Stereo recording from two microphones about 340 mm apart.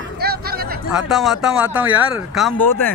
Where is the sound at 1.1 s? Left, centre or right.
Centre.